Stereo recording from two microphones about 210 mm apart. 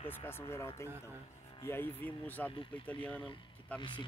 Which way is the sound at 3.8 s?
25° left (ahead or behind).